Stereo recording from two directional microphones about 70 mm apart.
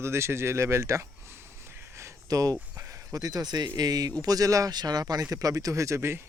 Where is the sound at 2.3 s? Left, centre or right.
Right.